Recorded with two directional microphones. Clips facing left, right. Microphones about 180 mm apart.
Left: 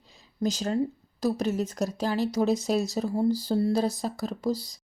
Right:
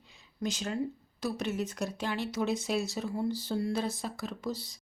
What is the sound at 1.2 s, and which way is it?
A woman's voice, 40° left (ahead or behind).